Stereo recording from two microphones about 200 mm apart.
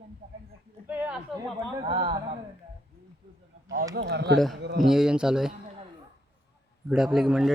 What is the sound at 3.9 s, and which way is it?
Speech, 55° right (ahead or behind).